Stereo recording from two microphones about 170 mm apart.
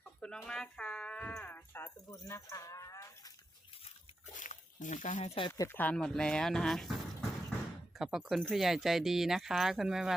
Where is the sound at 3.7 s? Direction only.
35° left (ahead or behind).